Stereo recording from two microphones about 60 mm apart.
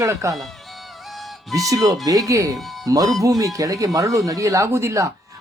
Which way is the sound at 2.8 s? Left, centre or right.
Right.